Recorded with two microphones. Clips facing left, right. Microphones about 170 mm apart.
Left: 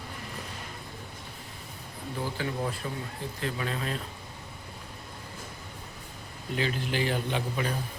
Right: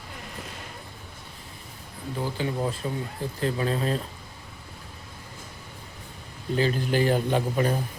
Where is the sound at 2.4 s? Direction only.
20° right (ahead or behind).